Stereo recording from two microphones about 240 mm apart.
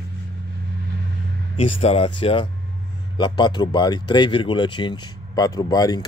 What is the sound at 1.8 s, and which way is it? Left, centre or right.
Speech, left.